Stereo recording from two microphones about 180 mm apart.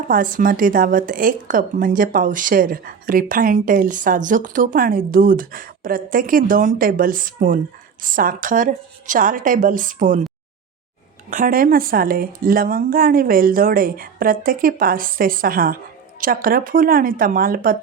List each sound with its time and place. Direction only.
0.1 s a woman's voice: 50° right (ahead or behind)
11.3 s a woman's voice: 50° right (ahead or behind)